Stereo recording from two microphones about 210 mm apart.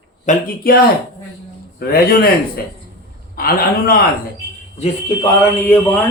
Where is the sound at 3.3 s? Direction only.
45° left (ahead or behind).